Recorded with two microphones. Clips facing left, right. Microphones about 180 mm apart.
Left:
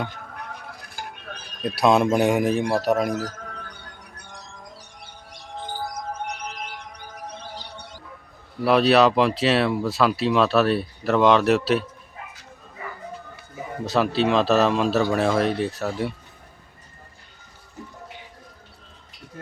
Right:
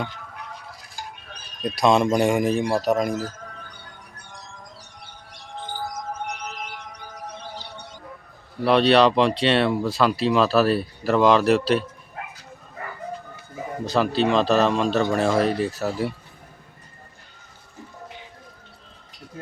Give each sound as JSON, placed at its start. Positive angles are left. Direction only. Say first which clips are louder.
{"t": 0.1, "sound": "music", "louder": "left 1 dB", "side_deg": 55}
{"t": 1.6, "sound": "speech", "louder": "even", "side_deg": 5}
{"t": 3.1, "sound": "speech", "louder": "even", "side_deg": 70}
{"t": 8.6, "sound": "speech", "louder": "even", "side_deg": 5}
{"t": 12.2, "sound": "bow-wow", "louder": "right 5 dB", "side_deg": -60}
{"t": 13.8, "sound": "speech", "louder": "even", "side_deg": 0}